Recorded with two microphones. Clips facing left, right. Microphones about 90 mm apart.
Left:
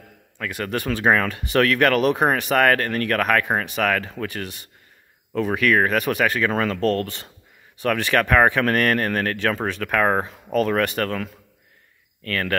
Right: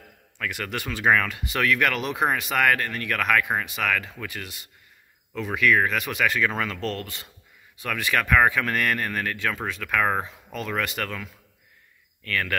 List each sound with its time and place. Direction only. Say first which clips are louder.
0.7 s speech: left 3 dB; 40° left (ahead or behind)
1.5 s speech: left 6 dB; 45° left (ahead or behind)
7.8 s speech: left 6 dB; 40° left (ahead or behind)
8.6 s speech: left 6 dB; 50° left (ahead or behind)
9.9 s speech: left 4 dB; 40° left (ahead or behind)
10.2 s speech: left 11 dB; 50° left (ahead or behind)